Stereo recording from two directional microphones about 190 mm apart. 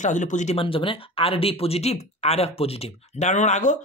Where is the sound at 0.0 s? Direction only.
40° left (ahead or behind).